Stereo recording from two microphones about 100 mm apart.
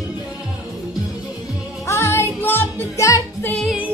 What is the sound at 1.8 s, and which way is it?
Music, 30° left (ahead or behind).